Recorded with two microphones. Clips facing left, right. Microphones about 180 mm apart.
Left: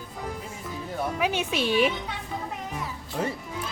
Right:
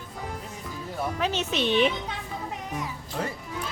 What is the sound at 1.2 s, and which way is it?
Speech, 10° left (ahead or behind).